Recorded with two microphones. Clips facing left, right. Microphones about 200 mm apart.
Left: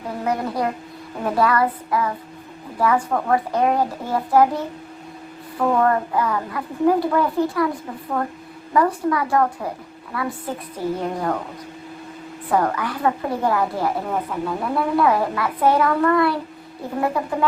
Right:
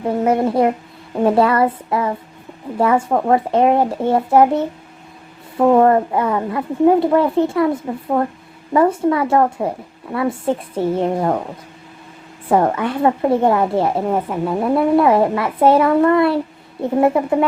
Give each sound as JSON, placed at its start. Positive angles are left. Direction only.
{"t": 0.3, "sound": "a woman's voice", "side_deg": -25}
{"t": 12.5, "sound": "a woman's voice", "side_deg": -25}